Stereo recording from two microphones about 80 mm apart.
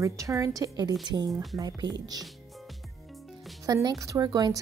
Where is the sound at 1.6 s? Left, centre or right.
Right.